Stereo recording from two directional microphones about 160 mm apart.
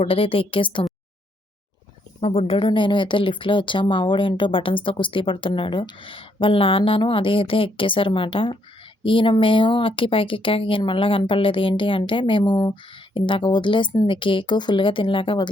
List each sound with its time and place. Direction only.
0.0 s speech: 35° left (ahead or behind)
2.2 s speech: 40° left (ahead or behind)